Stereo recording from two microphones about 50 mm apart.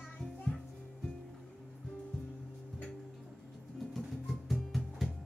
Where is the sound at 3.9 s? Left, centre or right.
Centre.